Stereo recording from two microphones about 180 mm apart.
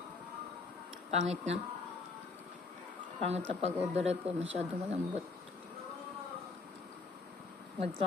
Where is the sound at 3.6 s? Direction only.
35° right (ahead or behind).